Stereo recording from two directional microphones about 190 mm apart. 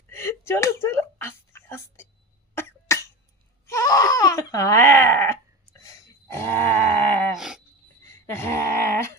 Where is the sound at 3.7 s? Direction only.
15° left (ahead or behind).